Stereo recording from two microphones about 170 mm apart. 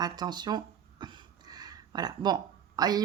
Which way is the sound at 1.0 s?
25° right (ahead or behind).